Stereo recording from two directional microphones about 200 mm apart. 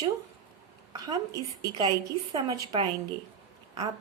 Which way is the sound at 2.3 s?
20° right (ahead or behind).